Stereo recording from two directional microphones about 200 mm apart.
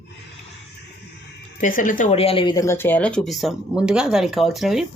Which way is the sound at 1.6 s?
40° left (ahead or behind).